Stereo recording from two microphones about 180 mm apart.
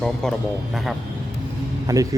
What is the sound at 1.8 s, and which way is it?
Speech, 20° right (ahead or behind).